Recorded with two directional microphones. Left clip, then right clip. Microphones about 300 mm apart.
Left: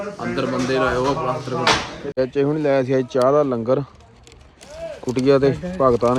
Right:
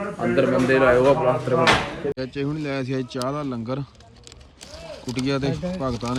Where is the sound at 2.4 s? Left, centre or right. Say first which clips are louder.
Left 9 dB; left.